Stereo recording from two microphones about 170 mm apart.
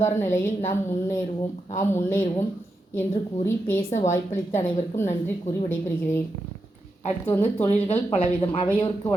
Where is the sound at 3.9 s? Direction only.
45° left (ahead or behind).